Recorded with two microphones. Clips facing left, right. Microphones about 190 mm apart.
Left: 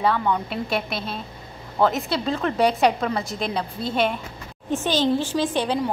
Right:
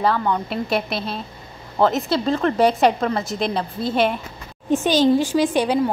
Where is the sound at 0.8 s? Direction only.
50° left (ahead or behind).